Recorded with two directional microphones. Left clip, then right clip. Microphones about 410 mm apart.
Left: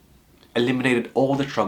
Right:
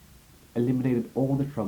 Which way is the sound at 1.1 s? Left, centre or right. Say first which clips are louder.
Left 8 dB; centre.